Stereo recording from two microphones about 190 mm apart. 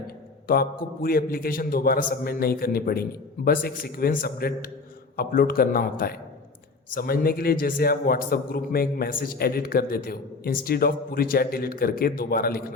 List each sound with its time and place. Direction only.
0.4 s a man's voice: 50° left (ahead or behind)